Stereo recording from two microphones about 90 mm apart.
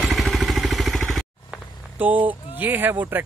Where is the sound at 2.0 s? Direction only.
20° right (ahead or behind).